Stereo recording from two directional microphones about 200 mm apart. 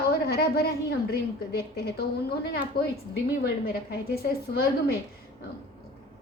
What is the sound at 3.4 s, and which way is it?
Speech, 55° left (ahead or behind).